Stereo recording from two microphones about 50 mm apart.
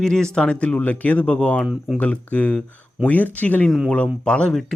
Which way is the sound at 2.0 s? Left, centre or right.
Left.